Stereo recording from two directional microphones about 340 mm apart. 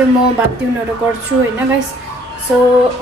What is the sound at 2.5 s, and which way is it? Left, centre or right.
Speech, centre.